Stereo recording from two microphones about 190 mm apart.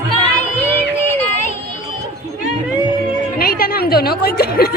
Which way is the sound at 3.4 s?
50° left (ahead or behind).